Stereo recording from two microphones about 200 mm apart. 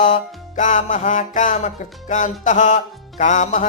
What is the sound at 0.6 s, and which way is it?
Music, 40° left (ahead or behind).